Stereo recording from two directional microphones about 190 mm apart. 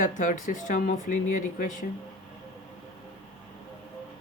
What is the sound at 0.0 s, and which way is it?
Speech, 40° left (ahead or behind).